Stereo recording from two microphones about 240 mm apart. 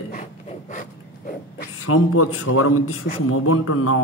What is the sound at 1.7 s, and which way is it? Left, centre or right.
A man's voice, left.